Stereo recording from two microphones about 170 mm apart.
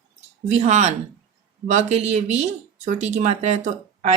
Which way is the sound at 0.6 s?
45° right (ahead or behind).